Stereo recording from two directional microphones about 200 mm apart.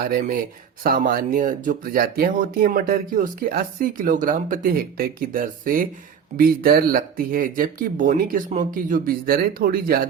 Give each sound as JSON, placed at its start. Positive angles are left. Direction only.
{"t": 0.0, "sound": "speech", "side_deg": -45}